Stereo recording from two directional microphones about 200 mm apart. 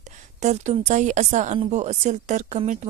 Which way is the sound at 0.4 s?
35° right (ahead or behind).